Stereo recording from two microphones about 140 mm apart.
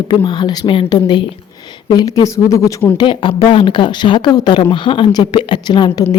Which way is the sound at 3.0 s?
35° left (ahead or behind).